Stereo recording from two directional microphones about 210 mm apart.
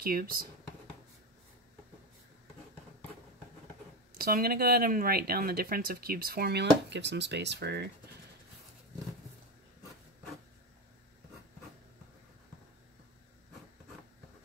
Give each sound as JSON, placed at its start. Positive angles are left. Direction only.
{"t": 0.0, "sound": "speech", "side_deg": -45}
{"t": 4.2, "sound": "speech", "side_deg": -45}